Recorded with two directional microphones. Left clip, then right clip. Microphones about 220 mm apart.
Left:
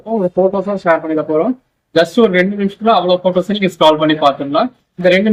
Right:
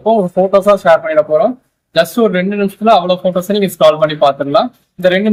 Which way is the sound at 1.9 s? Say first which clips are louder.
Left 1 dB; 25° right (ahead or behind).